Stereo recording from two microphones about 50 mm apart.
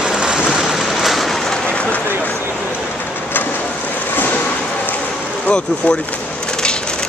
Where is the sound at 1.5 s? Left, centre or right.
Left.